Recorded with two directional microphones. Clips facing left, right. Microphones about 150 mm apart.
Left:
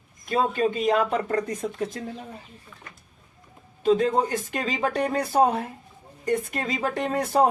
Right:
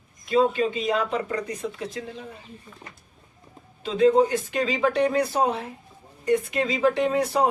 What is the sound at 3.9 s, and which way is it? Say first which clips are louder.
Speech: right 2 dB; 45° left (ahead or behind).